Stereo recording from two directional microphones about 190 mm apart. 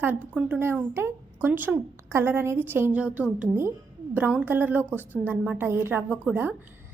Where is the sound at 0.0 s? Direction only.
10° right (ahead or behind).